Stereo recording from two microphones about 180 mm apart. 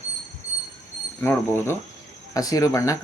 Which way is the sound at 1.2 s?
10° left (ahead or behind).